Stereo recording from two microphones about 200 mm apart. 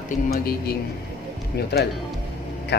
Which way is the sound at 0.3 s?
50° left (ahead or behind).